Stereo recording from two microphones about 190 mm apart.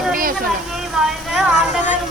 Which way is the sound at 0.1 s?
50° right (ahead or behind).